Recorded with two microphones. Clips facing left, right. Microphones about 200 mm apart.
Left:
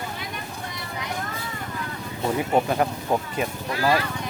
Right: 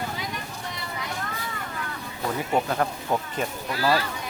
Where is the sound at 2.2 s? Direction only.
15° left (ahead or behind).